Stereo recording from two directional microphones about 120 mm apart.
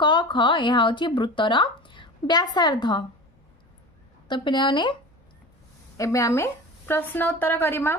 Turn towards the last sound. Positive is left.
turn(degrees=20)  # may be behind; listen again after turning